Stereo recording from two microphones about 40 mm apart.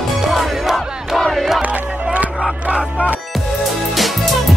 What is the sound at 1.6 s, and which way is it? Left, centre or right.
Music, right.